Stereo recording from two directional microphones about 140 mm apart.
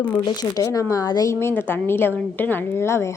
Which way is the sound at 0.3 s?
25° left (ahead or behind).